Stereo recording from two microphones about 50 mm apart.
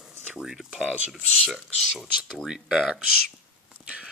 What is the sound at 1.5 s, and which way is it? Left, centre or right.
Speech, centre.